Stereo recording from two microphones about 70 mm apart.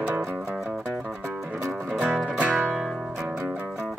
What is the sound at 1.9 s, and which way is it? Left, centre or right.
Music, centre.